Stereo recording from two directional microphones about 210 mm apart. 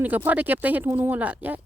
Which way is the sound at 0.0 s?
10° right (ahead or behind).